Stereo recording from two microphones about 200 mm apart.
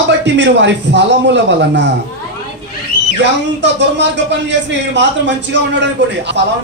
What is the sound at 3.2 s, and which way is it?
Speech, 65° right (ahead or behind).